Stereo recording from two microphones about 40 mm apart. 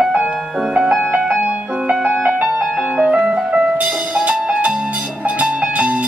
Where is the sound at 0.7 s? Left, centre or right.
Right.